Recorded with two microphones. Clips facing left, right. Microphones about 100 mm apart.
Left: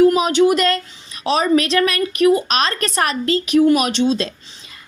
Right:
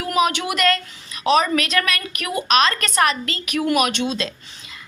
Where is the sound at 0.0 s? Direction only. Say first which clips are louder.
Left 8 dB; 30° left (ahead or behind).